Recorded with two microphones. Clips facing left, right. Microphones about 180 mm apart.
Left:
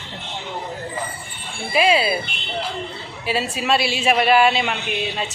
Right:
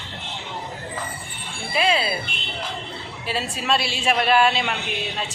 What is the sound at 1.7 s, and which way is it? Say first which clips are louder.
Speech: left 4 dB; 10° left (ahead or behind).